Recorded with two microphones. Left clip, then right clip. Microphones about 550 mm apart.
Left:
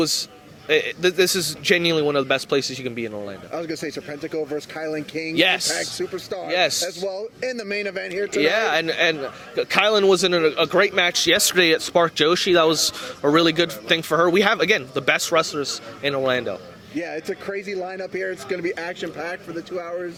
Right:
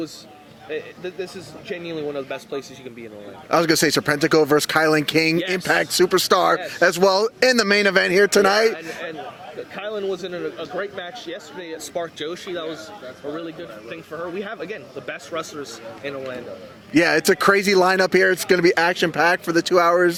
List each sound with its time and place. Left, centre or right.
0.0 s a man's voice: left
3.5 s speech: right
5.4 s speech: left
5.6 s speech: right
8.7 s a man's voice: left
11.9 s a man's voice: left
13.3 s a man's voice: left
14.3 s a man's voice: left
16.9 s speech: right